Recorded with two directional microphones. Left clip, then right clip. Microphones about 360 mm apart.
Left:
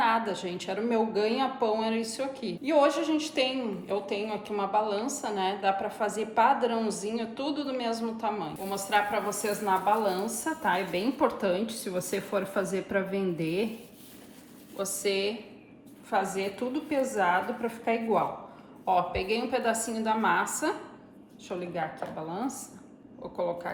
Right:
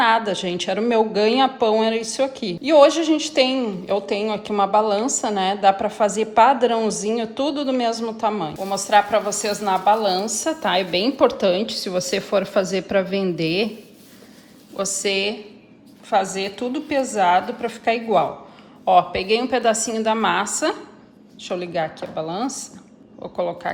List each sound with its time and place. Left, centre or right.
0.0 s a woman's voice: centre
14.8 s a woman's voice: centre